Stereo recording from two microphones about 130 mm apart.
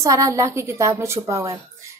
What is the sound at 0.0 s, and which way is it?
A woman's voice, 25° right (ahead or behind).